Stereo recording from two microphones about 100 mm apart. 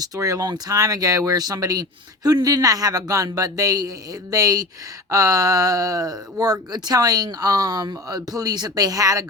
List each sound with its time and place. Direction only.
0.0 s speech: 35° right (ahead or behind)